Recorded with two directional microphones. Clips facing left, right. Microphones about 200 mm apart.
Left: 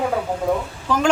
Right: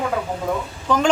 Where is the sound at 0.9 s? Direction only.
5° left (ahead or behind).